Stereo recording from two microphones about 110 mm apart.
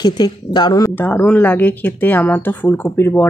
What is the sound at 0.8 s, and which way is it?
Speech, 15° left (ahead or behind).